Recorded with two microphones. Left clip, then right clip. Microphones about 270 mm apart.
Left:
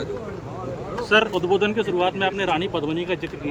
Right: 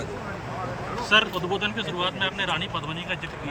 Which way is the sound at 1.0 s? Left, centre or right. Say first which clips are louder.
Left 3 dB; centre.